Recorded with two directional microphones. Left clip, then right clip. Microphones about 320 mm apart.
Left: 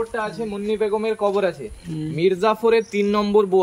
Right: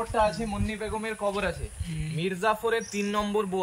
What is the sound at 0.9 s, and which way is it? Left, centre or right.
A man's voice, left.